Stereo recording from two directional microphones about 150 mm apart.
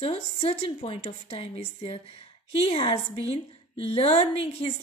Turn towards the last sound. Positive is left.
turn(degrees=40)  # may be behind; listen again after turning